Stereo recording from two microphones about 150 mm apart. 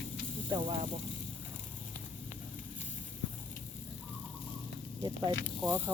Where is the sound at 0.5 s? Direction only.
40° right (ahead or behind).